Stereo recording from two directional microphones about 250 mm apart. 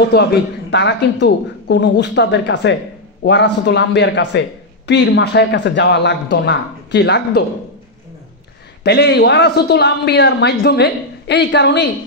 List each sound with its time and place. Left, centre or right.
0.0 s a man's voice: left
8.8 s a man's voice: left